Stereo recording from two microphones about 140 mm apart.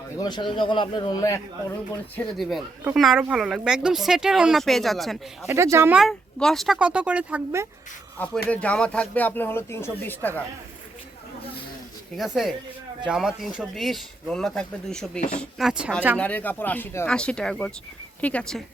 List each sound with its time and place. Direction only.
0.2 s a man's voice: 35° left (ahead or behind)
2.4 s speech: centre (ahead or behind)
5.5 s speech: 20° right (ahead or behind)
6.0 s speech: centre (ahead or behind)
6.7 s speech: 10° right (ahead or behind)
8.4 s speech: 10° left (ahead or behind)
12.1 s speech: centre (ahead or behind)
16.1 s speech: 10° left (ahead or behind)